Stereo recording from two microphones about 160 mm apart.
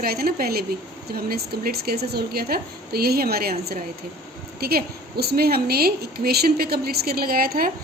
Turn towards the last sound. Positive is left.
turn(degrees=-65)  # may be behind; listen again after turning